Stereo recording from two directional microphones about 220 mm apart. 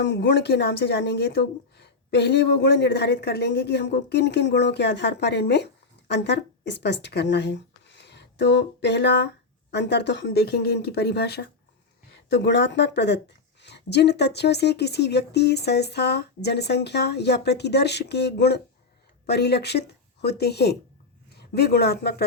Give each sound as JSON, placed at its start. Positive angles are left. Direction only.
{"t": 0.0, "sound": "speech", "side_deg": 55}